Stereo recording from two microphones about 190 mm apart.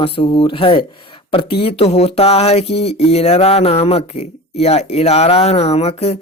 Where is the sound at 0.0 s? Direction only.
30° left (ahead or behind).